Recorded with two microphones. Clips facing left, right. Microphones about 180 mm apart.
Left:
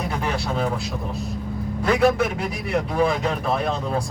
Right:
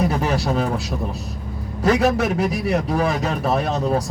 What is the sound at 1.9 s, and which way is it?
A man's voice, 40° right (ahead or behind).